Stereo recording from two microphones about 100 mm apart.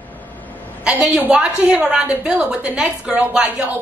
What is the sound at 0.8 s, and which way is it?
A woman's voice, 10° right (ahead or behind).